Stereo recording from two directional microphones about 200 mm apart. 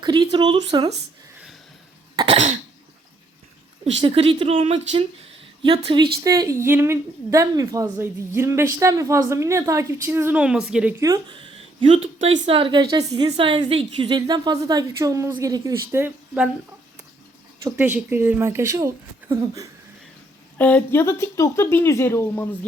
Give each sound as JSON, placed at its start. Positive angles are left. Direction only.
{"t": 0.0, "sound": "a woman's voice", "side_deg": -20}
{"t": 2.1, "sound": "cough", "side_deg": -30}
{"t": 4.0, "sound": "a woman's voice", "side_deg": -25}
{"t": 11.0, "sound": "a woman's voice", "side_deg": -20}
{"t": 17.6, "sound": "a woman's voice", "side_deg": -15}
{"t": 20.6, "sound": "speech", "side_deg": 10}